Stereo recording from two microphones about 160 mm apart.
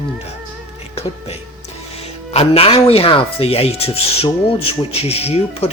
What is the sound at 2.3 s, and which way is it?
Speech, 35° left (ahead or behind).